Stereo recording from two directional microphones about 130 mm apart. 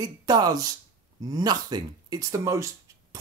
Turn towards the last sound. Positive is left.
turn(degrees=-25)  # may be behind; listen again after turning